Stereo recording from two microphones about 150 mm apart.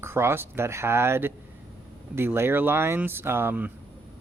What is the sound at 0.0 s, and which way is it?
Speech, 15° right (ahead or behind).